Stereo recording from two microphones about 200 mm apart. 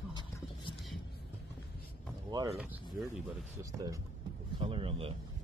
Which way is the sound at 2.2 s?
20° right (ahead or behind).